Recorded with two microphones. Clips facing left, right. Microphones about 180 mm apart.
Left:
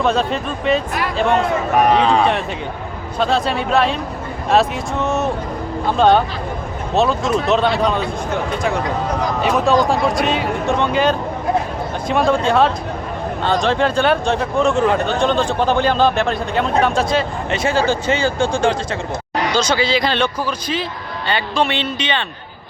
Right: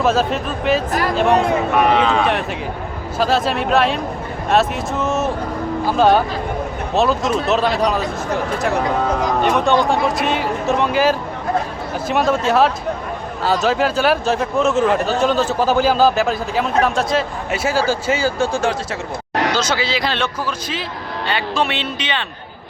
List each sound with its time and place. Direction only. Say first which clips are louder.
0.0 s speech: right 1 dB; 5° right (ahead or behind)
1.7 s speech: left 3 dB; 40° left (ahead or behind)
3.2 s speech: even; 5° right (ahead or behind)